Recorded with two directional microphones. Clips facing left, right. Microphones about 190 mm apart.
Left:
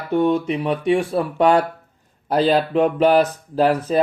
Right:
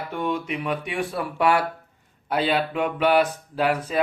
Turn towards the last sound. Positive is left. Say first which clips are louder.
# left 6 dB
turn(degrees=35)  # may be behind; listen again after turning